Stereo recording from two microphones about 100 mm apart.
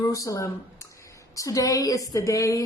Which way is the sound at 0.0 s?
30° left (ahead or behind).